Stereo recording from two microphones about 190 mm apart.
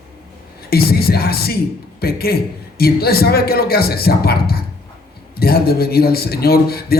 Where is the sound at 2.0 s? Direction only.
55° left (ahead or behind).